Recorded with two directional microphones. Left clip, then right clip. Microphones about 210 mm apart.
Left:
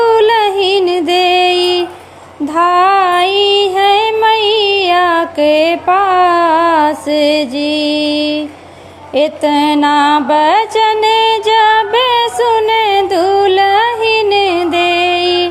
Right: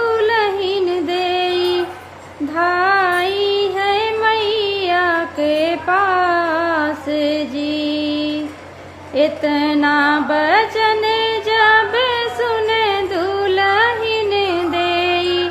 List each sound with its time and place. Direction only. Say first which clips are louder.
0.0 s music: left 7 dB; 25° left (ahead or behind)
2.6 s female singing: left 6 dB; 25° left (ahead or behind)
9.1 s music: left 5 dB; 25° left (ahead or behind)